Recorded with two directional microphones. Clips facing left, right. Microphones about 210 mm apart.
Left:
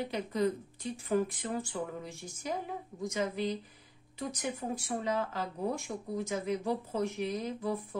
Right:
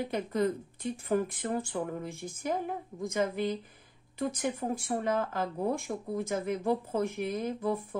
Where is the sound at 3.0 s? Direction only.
55° right (ahead or behind).